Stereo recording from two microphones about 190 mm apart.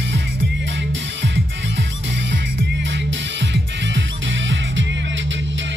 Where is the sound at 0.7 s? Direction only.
70° right (ahead or behind).